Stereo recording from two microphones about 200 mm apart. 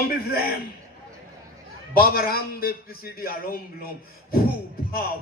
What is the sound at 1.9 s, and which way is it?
A man's voice, 50° left (ahead or behind).